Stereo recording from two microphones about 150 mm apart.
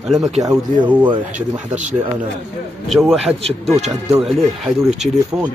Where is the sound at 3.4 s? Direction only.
45° right (ahead or behind).